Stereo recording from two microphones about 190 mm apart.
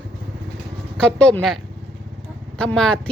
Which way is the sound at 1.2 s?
5° left (ahead or behind).